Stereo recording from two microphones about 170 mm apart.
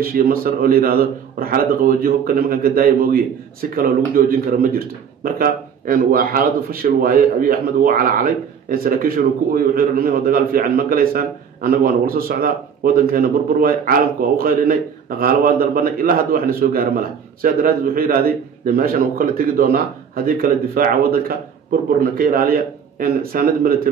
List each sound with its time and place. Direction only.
0.0 s a man's voice: 60° right (ahead or behind)